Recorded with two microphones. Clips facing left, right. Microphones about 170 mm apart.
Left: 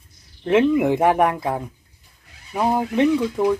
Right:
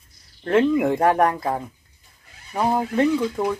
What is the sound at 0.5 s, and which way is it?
Speech, 5° left (ahead or behind).